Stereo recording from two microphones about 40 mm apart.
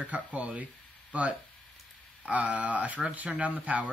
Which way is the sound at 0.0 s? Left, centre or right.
Right.